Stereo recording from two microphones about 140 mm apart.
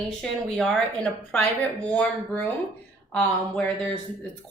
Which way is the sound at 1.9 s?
10° left (ahead or behind).